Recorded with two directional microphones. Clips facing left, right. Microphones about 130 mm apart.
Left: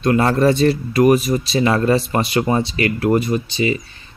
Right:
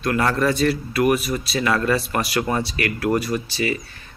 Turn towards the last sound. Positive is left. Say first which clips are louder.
# left 4 dB
turn(degrees=20)  # may be behind; listen again after turning